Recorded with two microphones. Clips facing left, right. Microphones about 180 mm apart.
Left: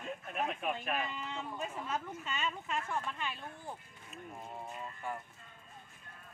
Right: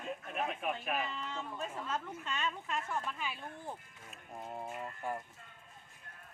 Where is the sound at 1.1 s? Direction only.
10° left (ahead or behind).